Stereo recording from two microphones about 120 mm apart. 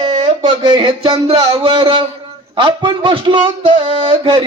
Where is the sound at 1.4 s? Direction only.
35° right (ahead or behind).